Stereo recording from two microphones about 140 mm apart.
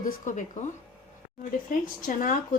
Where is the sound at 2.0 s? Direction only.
65° left (ahead or behind).